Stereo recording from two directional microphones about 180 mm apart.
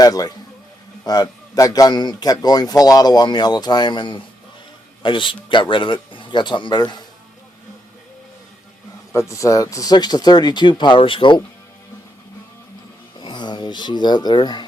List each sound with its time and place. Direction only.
0.0 s a man's voice: 20° left (ahead or behind)
9.1 s a man's voice: 15° left (ahead or behind)
13.1 s speech: 25° left (ahead or behind)